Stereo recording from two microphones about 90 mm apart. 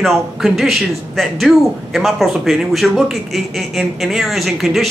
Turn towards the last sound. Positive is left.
turn(degrees=0)  # may be behind; listen again after turning